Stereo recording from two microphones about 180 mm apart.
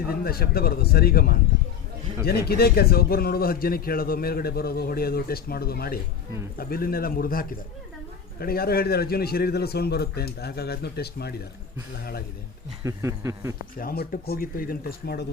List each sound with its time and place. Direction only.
0.1 s a man's voice: 60° left (ahead or behind)
12.8 s a sound: 15° right (ahead or behind)
13.7 s a man's voice: 55° left (ahead or behind)